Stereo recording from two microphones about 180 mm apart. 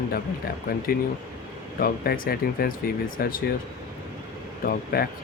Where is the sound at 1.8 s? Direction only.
55° left (ahead or behind).